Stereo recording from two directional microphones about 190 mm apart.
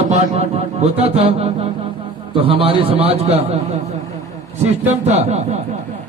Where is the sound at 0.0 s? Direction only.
35° right (ahead or behind).